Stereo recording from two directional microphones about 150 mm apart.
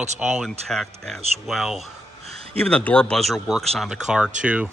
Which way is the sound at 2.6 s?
10° left (ahead or behind).